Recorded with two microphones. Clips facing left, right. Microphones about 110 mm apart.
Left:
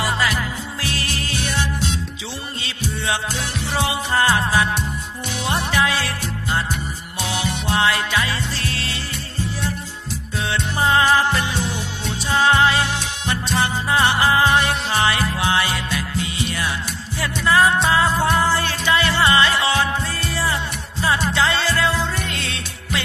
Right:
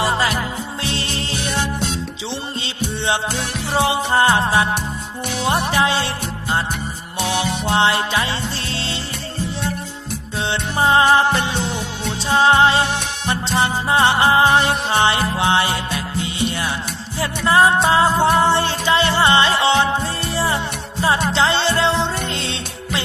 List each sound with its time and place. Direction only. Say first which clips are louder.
0.0 s music: right 3 dB; 25° right (ahead or behind)
3.7 s music: right 5 dB; 25° right (ahead or behind)
7.2 s music: right 4 dB; 25° right (ahead or behind)
10.5 s music: right 3 dB; 25° right (ahead or behind)